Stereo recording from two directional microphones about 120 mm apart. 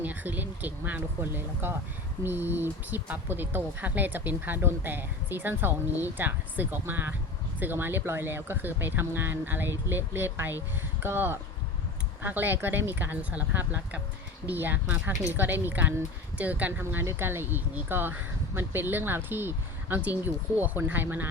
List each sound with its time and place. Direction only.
0.0 s speech: 15° right (ahead or behind)